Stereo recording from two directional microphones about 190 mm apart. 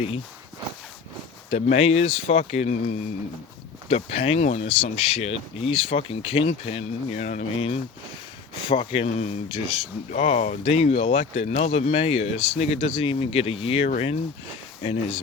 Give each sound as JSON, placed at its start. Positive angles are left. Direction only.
{"t": 1.5, "sound": "speech", "side_deg": 35}
{"t": 3.8, "sound": "speech", "side_deg": 30}